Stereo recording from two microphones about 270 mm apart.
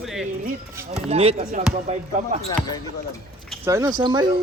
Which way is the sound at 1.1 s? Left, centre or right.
Right.